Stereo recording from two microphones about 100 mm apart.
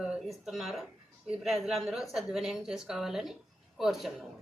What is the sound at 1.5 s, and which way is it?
Speech, centre (ahead or behind).